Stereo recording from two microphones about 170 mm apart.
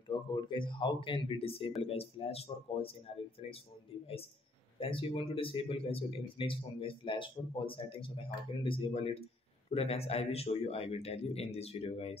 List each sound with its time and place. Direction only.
0.1 s speech: 25° left (ahead or behind)
4.7 s speech: 30° left (ahead or behind)